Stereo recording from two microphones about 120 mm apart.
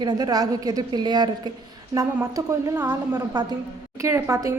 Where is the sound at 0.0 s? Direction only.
35° right (ahead or behind).